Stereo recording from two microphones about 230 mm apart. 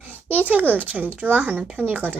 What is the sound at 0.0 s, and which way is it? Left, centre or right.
Speech, centre.